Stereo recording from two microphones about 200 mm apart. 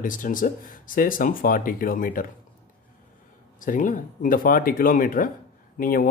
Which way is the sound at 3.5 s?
40° left (ahead or behind).